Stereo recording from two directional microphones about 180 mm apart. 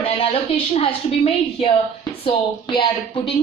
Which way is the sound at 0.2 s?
30° left (ahead or behind).